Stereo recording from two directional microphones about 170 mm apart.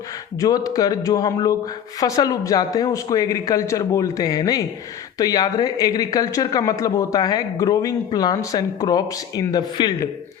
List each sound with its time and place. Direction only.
0.3 s speech: 20° left (ahead or behind)